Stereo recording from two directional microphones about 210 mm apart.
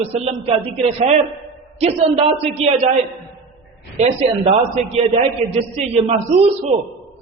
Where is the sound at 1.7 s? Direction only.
30° right (ahead or behind).